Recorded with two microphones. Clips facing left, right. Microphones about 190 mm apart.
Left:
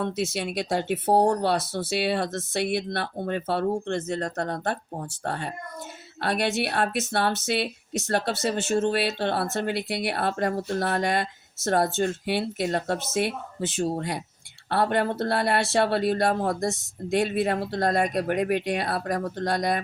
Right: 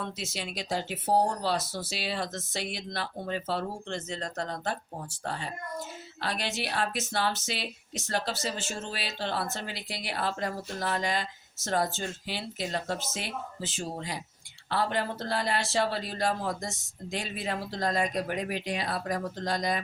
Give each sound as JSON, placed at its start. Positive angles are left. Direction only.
{"t": 0.0, "sound": "speech", "side_deg": 60}